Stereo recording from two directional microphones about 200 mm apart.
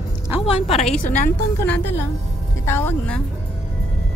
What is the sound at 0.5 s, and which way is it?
Speech, 30° left (ahead or behind).